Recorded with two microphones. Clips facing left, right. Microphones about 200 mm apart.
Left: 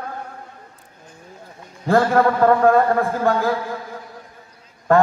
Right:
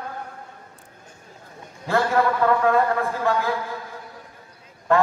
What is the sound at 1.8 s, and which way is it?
A man's voice, 40° left (ahead or behind).